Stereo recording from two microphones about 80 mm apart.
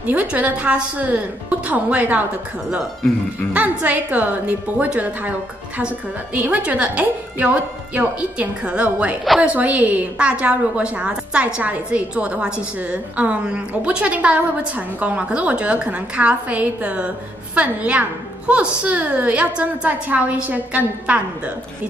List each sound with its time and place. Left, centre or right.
0.0 s a woman's voice: centre
3.5 s a woman's voice: centre